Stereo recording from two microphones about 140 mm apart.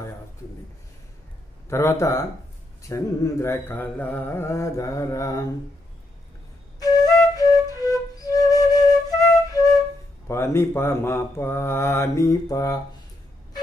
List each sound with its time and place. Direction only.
1.7 s mantra: 20° left (ahead or behind)
6.8 s flute: 25° left (ahead or behind)
10.2 s speech: 20° left (ahead or behind)